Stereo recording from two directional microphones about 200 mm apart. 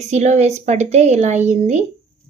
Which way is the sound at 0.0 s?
35° right (ahead or behind).